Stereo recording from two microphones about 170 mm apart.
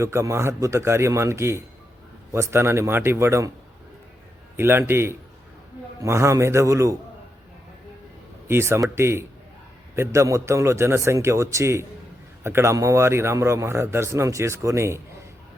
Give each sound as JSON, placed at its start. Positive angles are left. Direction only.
{"t": 0.0, "sound": "a man's voice", "side_deg": -15}
{"t": 4.5, "sound": "a man's voice", "side_deg": -15}
{"t": 8.4, "sound": "a man's voice", "side_deg": -15}